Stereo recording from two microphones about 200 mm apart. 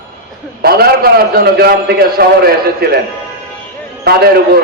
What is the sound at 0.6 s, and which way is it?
A man's voice, 50° right (ahead or behind).